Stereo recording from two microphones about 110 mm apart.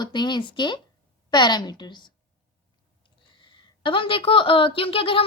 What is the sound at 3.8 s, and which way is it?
A woman's voice, 50° left (ahead or behind).